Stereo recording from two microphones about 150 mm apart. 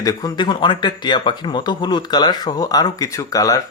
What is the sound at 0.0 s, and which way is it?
Speech, 25° left (ahead or behind).